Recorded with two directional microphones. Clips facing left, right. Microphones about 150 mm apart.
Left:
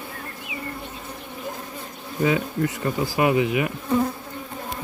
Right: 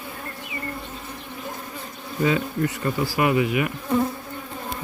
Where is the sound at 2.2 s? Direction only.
20° left (ahead or behind).